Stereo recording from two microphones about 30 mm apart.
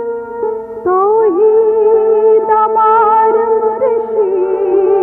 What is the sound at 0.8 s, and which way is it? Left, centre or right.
Music, centre.